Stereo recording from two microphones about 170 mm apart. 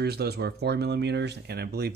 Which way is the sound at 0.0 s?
70° right (ahead or behind).